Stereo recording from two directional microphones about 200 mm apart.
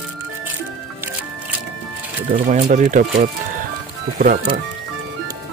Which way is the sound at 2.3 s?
40° right (ahead or behind).